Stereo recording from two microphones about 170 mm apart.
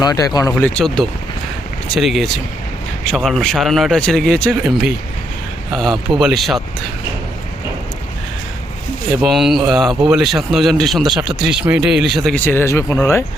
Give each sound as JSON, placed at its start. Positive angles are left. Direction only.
{"t": 0.0, "sound": "speech", "side_deg": 20}
{"t": 0.6, "sound": "speech", "side_deg": 5}
{"t": 9.2, "sound": "speech", "side_deg": 0}
{"t": 12.5, "sound": "speech", "side_deg": 15}